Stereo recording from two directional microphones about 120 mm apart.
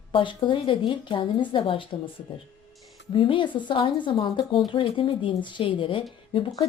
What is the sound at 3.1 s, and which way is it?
A woman's voice, 45° left (ahead or behind).